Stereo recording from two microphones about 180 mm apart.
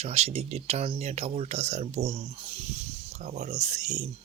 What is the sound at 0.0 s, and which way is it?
Speech, 35° right (ahead or behind).